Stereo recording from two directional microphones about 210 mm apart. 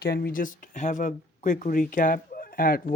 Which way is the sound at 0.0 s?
45° left (ahead or behind).